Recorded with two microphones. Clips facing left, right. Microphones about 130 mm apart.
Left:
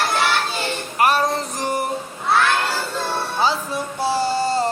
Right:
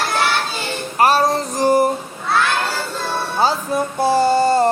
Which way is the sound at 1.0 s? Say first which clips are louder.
Right 3 dB; 30° right (ahead or behind).